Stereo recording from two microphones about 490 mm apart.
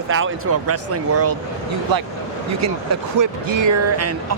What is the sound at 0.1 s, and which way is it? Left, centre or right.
Speech, right.